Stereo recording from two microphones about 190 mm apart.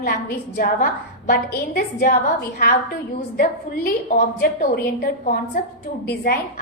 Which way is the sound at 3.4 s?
50° left (ahead or behind).